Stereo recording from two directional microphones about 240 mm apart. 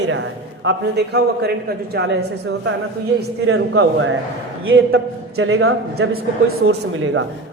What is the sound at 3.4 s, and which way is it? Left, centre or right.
Speech, right.